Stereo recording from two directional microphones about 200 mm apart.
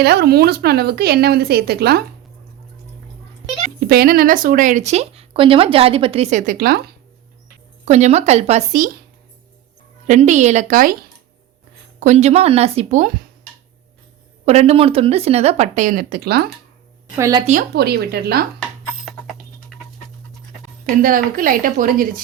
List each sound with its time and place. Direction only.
0.0 s speech: 55° right (ahead or behind)
3.8 s speech: 50° right (ahead or behind)
7.9 s speech: 35° right (ahead or behind)
10.1 s speech: 35° right (ahead or behind)
11.9 s speech: 35° right (ahead or behind)
14.4 s speech: 30° right (ahead or behind); by 16.5 s 50° right (ahead or behind)
17.2 s a woman's voice: 15° right (ahead or behind)
17.4 s speech: 40° right (ahead or behind)
17.7 s speech: 55° right (ahead or behind)
19.0 s typing: centre (ahead or behind)
21.0 s speech: 45° right (ahead or behind)